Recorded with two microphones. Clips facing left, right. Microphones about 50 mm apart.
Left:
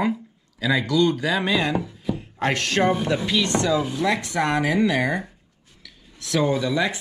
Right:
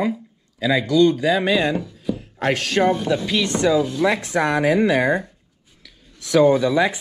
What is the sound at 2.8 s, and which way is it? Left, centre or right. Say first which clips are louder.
Speech: right 2 dB; centre.